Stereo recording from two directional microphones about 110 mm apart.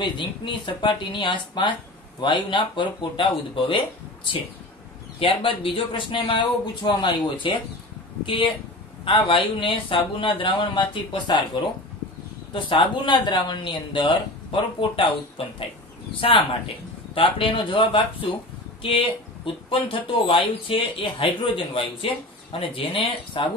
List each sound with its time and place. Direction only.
0.0 s speech: 45° left (ahead or behind)
9.0 s speech: 50° left (ahead or behind)
12.5 s speech: 50° left (ahead or behind)